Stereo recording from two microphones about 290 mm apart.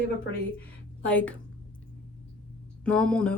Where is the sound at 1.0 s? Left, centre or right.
Centre.